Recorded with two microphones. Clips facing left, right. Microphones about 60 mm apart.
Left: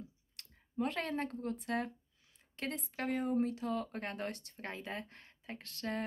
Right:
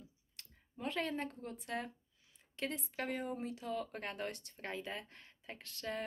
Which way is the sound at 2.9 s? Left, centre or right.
Left.